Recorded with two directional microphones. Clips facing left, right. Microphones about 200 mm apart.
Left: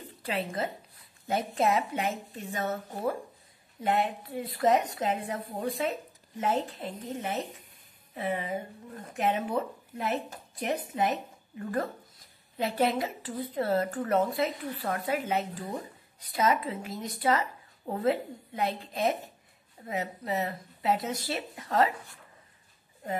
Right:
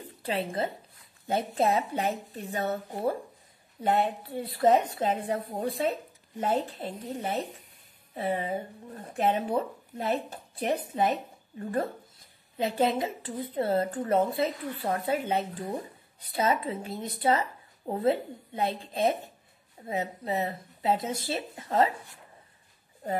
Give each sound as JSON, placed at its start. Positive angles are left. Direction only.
{"t": 0.3, "sound": "a woman's voice", "side_deg": -30}
{"t": 19.9, "sound": "a woman's voice", "side_deg": -25}
{"t": 23.0, "sound": "speech", "side_deg": -35}